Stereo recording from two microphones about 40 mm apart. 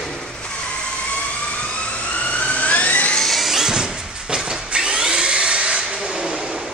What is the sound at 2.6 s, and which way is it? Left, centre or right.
Vehicle, left.